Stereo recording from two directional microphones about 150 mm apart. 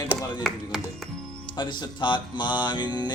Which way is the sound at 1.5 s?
30° left (ahead or behind).